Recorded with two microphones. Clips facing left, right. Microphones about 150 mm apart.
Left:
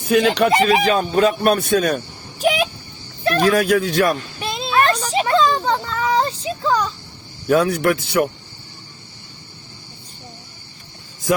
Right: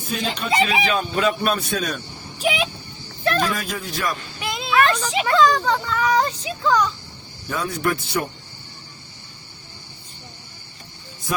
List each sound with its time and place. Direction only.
0.1 s speech: 75° left (ahead or behind)
0.5 s fowl: 45° left (ahead or behind)
2.4 s a sound: 45° left (ahead or behind)
3.4 s speech: 70° left (ahead or behind)
4.4 s a sound: 30° left (ahead or behind)
7.4 s speech: 70° left (ahead or behind)